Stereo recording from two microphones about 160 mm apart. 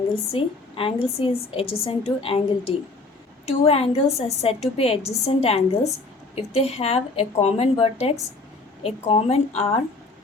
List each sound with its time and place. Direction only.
0.3 s a woman's voice: 35° left (ahead or behind)